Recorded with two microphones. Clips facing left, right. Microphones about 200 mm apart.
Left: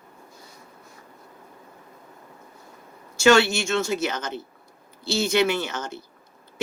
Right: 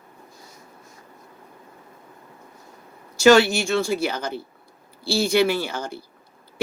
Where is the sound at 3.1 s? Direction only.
35° right (ahead or behind).